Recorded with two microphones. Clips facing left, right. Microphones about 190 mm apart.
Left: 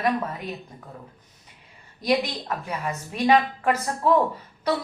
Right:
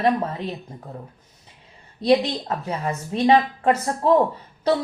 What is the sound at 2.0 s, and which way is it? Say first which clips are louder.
Speech: right 5 dB; 25° right (ahead or behind).